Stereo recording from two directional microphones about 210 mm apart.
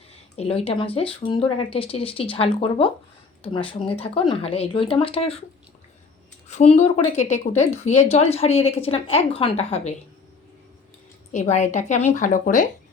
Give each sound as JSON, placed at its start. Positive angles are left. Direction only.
{"t": 0.3, "sound": "a woman's voice", "side_deg": 25}
{"t": 6.5, "sound": "a woman's voice", "side_deg": 30}
{"t": 11.3, "sound": "a woman's voice", "side_deg": 35}